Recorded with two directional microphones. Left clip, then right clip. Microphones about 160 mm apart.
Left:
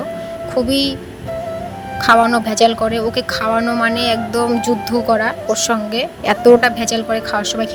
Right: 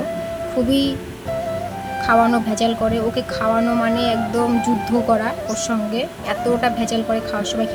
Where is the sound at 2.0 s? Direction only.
50° left (ahead or behind).